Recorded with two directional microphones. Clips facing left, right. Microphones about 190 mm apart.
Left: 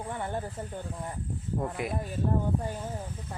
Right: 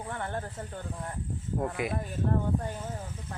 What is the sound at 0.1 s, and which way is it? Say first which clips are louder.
Speech: left 1 dB; 10° left (ahead or behind).